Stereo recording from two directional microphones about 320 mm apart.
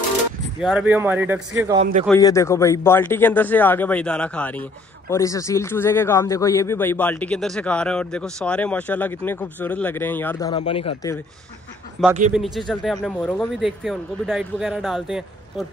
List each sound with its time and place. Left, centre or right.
0.6 s speech: centre
1.8 s speech: right
2.0 s a man's voice: centre
12.0 s speech: centre